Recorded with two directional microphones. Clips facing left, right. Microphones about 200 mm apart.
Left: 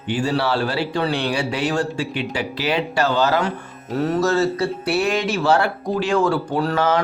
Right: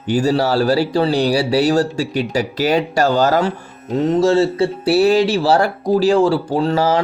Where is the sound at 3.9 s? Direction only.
20° right (ahead or behind).